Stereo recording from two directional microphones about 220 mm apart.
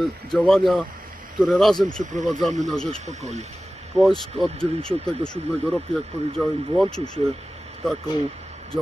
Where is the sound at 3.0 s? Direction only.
30° right (ahead or behind).